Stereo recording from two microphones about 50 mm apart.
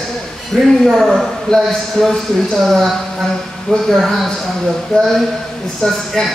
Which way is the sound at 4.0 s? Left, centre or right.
Centre.